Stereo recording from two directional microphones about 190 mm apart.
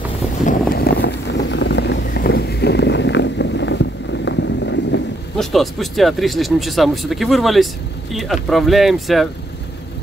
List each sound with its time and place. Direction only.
0.7 s vehicle: 55° left (ahead or behind)
5.4 s speech: centre (ahead or behind)